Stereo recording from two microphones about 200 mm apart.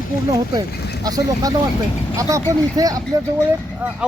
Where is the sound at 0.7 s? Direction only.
55° left (ahead or behind).